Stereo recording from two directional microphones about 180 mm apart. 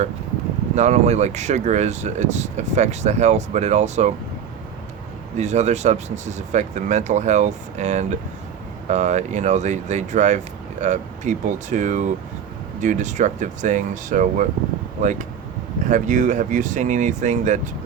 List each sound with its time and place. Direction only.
0.8 s speech: 40° right (ahead or behind)
5.4 s speech: 40° right (ahead or behind)